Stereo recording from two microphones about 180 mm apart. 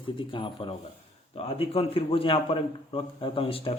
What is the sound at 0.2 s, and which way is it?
A man's voice, 30° left (ahead or behind).